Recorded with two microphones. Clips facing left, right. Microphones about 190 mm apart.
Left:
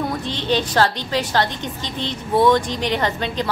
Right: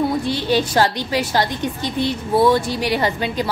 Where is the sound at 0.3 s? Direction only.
10° right (ahead or behind).